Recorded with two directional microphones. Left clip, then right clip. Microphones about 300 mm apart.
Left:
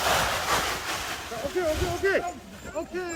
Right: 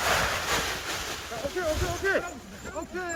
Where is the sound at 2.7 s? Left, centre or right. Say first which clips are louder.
Left 2 dB; left.